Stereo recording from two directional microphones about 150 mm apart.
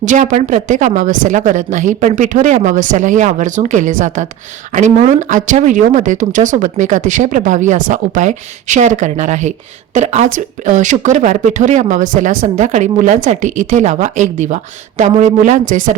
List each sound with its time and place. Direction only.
0.0 s speech: 55° right (ahead or behind)